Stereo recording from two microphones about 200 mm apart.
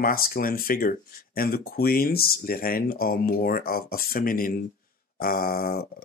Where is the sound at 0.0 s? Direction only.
45° left (ahead or behind).